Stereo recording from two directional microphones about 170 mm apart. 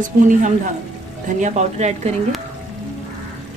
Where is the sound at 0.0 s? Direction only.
50° right (ahead or behind).